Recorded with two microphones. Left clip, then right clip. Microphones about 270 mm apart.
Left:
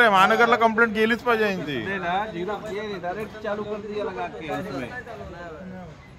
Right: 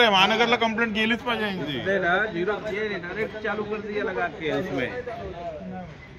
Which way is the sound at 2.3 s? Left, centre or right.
Centre.